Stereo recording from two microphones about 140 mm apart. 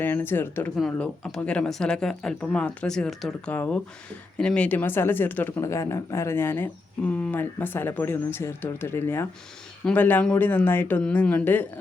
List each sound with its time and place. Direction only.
0.0 s speech: 15° left (ahead or behind)